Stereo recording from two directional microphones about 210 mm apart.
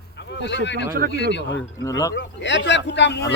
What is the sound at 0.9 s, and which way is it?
Speech, 45° right (ahead or behind).